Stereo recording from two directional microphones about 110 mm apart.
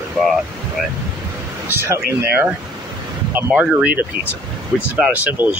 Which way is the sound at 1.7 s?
20° right (ahead or behind).